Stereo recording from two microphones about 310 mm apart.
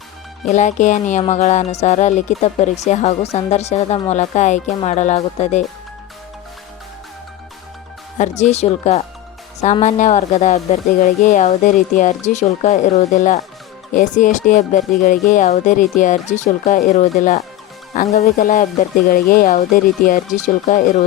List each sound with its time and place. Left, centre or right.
0.5 s speech: left
8.2 s speech: left